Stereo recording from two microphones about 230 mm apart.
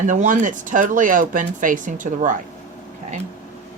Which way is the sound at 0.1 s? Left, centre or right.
Right.